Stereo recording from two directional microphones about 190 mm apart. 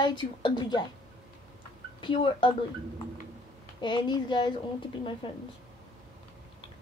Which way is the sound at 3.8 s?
25° left (ahead or behind).